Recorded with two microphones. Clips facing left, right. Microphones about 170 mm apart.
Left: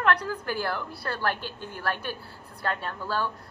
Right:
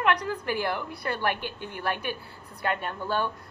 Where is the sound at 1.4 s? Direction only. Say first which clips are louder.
Right 2 dB; 60° right (ahead or behind).